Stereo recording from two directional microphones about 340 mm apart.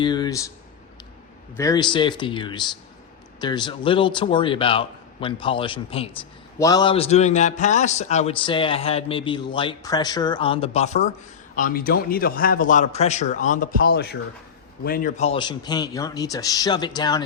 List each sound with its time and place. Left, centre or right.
0.0 s a man's voice: centre
1.5 s a man's voice: centre